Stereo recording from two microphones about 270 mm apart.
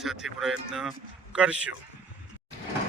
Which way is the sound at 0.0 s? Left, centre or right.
Centre.